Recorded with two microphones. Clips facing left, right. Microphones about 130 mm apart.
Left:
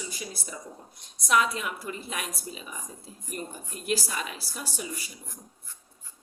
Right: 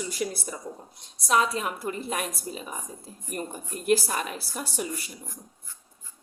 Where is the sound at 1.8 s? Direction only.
45° right (ahead or behind).